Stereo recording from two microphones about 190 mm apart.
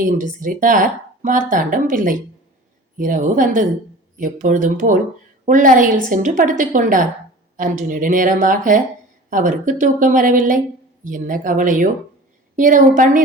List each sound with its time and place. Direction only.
0.0 s speech: 45° right (ahead or behind)